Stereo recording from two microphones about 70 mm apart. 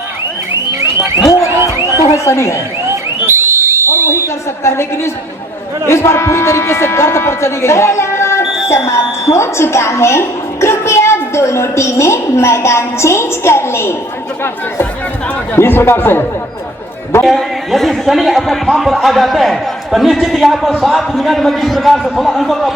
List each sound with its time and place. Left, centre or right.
2.1 s speech: left
3.2 s a sound: right
4.6 s a woman's voice: left
15.5 s speech: left
17.2 s a man's voice: centre